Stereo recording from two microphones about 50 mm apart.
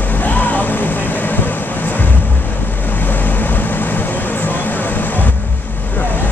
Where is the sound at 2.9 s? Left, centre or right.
Left.